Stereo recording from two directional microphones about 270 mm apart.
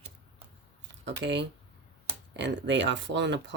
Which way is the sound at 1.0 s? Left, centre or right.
Right.